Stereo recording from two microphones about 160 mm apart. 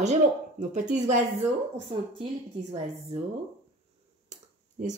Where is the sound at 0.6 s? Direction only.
50° right (ahead or behind).